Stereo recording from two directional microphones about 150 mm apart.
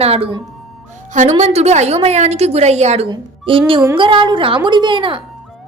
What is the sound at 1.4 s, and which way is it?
A woman's voice, 45° right (ahead or behind).